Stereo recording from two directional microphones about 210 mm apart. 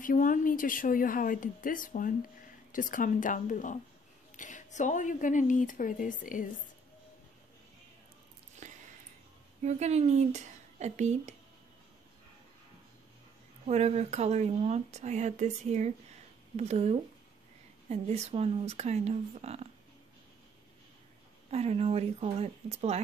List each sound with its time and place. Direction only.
0.0 s a woman's voice: 40° left (ahead or behind)
8.6 s a sound: 35° right (ahead or behind)
9.6 s a woman's voice: 30° right (ahead or behind)
13.7 s speech: 30° right (ahead or behind)
21.5 s speech: 30° right (ahead or behind)